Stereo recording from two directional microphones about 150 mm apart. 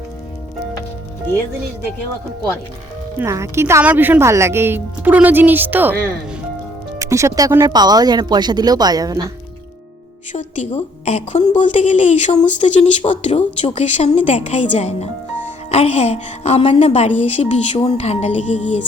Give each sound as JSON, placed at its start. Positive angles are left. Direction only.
{"t": 3.2, "sound": "a woman's voice", "side_deg": -20}
{"t": 7.0, "sound": "speech", "side_deg": -20}
{"t": 10.3, "sound": "speech", "side_deg": 50}